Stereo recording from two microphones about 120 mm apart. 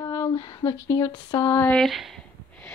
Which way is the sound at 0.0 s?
30° left (ahead or behind).